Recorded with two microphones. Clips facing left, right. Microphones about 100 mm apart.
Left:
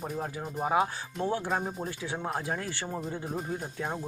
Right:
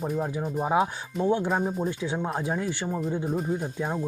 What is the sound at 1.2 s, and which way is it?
Speech, 20° right (ahead or behind).